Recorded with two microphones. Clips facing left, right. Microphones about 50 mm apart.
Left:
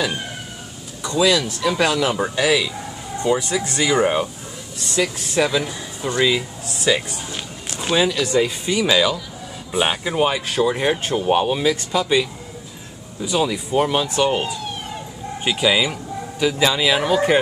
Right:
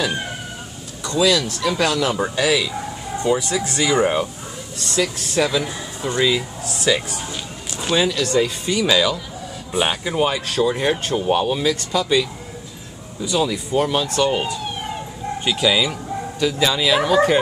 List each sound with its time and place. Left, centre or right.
1.0 s speech: centre